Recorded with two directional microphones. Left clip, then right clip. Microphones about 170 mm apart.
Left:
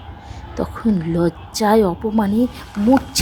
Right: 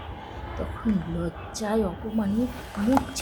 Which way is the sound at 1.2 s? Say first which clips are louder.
Left 13 dB; 50° left (ahead or behind).